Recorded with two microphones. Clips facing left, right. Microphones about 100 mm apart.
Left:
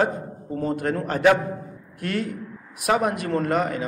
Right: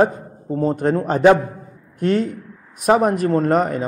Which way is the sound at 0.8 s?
30° right (ahead or behind).